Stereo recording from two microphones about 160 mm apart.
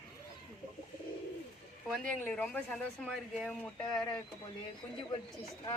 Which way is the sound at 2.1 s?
10° left (ahead or behind).